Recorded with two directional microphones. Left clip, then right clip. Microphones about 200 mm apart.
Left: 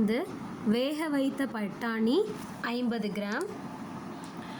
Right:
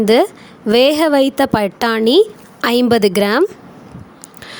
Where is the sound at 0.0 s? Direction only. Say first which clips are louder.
Right 19 dB; 55° right (ahead or behind).